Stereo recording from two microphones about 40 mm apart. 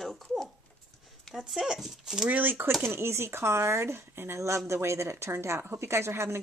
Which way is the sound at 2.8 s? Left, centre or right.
Right.